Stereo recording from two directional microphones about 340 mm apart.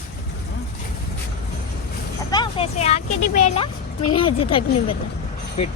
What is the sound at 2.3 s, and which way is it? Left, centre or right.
Speech, centre.